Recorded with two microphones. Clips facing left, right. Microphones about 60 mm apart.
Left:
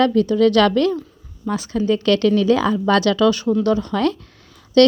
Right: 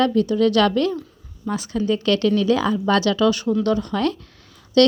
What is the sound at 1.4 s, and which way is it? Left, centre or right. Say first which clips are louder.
Speech: left 2 dB; left.